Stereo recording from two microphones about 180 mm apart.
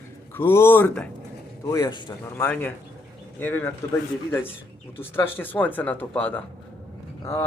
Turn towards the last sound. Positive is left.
turn(degrees=15)  # may be behind; listen again after turning